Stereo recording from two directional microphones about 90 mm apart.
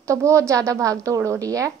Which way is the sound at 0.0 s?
35° right (ahead or behind).